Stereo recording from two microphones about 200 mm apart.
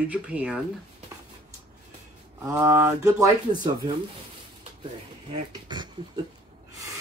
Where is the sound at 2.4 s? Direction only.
10° right (ahead or behind).